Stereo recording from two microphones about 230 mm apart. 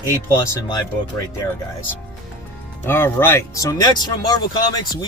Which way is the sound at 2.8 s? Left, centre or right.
Centre.